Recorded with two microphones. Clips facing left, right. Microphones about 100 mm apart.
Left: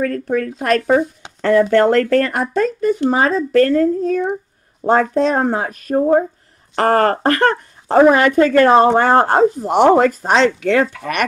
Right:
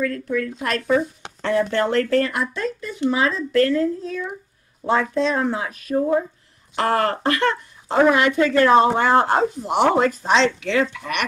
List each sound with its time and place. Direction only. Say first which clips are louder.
0.0 s speech: left 4 dB; 55° left (ahead or behind)